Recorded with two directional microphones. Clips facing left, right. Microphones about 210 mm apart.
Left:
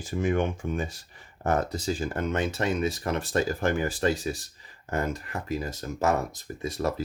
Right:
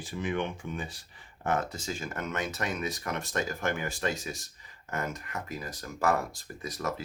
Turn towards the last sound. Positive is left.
turn(degrees=30)  # may be behind; listen again after turning